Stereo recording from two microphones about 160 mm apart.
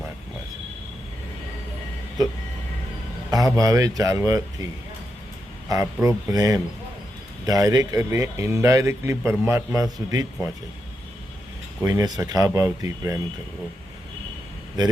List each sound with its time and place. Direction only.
3.3 s speech: 20° right (ahead or behind)
5.6 s speech: 20° right (ahead or behind)
11.8 s speech: 20° right (ahead or behind)